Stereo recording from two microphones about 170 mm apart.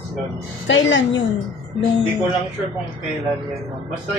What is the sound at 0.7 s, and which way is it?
Speech, 90° left.